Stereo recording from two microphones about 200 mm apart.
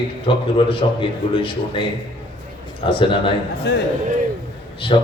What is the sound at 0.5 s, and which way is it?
A man's voice, 25° left (ahead or behind).